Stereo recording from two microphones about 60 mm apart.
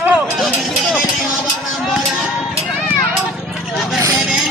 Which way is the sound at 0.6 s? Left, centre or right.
Centre.